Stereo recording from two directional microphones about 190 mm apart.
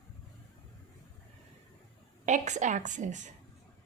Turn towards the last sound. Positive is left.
turn(degrees=-40)  # may be behind; listen again after turning